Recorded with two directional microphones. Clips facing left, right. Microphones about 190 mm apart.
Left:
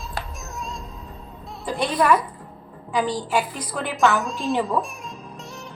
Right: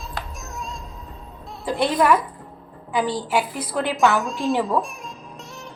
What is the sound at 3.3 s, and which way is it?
A woman's voice, 10° right (ahead or behind).